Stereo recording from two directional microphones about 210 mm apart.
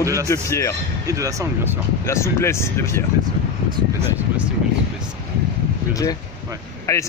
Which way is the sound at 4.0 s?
10° right (ahead or behind).